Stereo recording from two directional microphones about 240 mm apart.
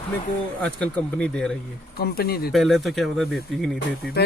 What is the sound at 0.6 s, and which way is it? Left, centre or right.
Speech, centre.